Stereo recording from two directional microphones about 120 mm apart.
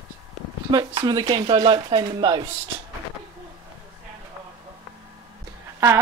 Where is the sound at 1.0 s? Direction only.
35° right (ahead or behind).